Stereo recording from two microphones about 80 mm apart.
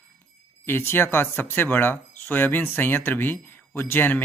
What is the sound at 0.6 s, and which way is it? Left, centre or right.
Speech, left.